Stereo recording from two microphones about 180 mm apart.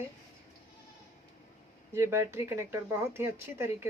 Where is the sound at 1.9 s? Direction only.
15° right (ahead or behind).